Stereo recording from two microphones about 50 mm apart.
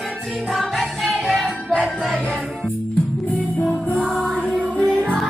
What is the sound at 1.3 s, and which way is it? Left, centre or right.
Music, centre.